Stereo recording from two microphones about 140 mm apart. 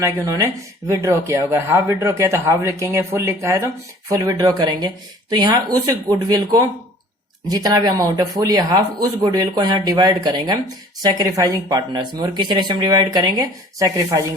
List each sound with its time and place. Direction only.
0.0 s speech: 20° right (ahead or behind)